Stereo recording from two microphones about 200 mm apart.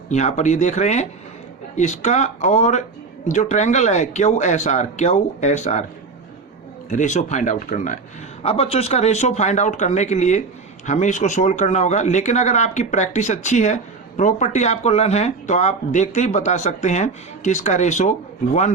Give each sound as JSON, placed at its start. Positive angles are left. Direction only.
{"t": 0.1, "sound": "speech", "side_deg": 35}
{"t": 6.9, "sound": "speech", "side_deg": 35}